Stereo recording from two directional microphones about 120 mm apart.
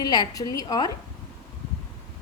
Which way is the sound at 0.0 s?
35° left (ahead or behind).